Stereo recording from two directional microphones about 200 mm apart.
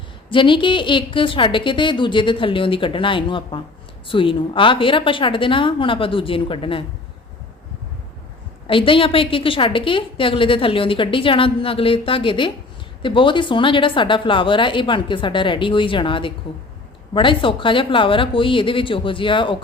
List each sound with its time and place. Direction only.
0.3 s a woman's voice: 25° left (ahead or behind)
8.6 s a woman's voice: 25° left (ahead or behind)